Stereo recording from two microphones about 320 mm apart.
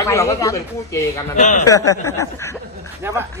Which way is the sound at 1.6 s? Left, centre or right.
Centre.